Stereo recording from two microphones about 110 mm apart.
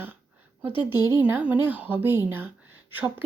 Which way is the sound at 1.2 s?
15° right (ahead or behind).